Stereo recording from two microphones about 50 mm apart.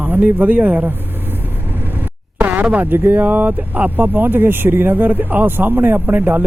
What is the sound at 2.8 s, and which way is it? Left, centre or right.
Speech, right.